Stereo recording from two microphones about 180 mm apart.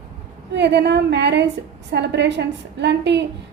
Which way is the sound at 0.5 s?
70° right (ahead or behind).